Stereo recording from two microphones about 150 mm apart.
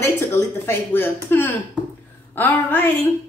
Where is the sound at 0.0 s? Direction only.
15° left (ahead or behind).